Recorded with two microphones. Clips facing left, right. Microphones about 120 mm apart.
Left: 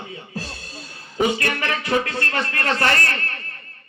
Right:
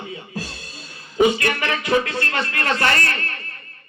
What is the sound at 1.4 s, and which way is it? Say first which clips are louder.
A man's voice: right 2 dB; 35° left (ahead or behind).